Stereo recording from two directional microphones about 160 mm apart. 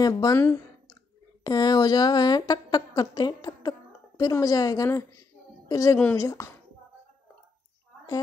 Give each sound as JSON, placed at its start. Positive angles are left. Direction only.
{"t": 0.0, "sound": "a woman's voice", "side_deg": 25}